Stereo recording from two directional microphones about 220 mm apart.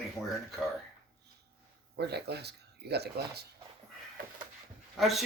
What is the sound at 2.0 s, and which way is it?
Speech, 50° right (ahead or behind).